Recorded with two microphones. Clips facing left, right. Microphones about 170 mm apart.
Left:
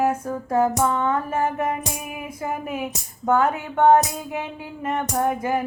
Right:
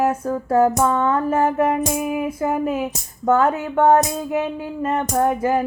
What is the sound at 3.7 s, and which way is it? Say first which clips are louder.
Speech: even; 35° right (ahead or behind).